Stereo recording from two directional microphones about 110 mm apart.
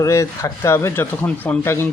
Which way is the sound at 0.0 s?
30° left (ahead or behind).